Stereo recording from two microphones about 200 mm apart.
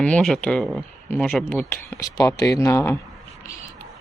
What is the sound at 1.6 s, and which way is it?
Speech, 15° left (ahead or behind).